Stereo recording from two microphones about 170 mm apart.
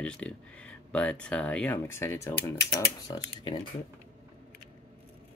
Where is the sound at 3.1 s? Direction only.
25° left (ahead or behind).